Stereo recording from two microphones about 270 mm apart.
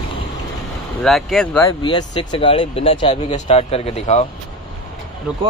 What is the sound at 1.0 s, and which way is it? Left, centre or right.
Speech, centre.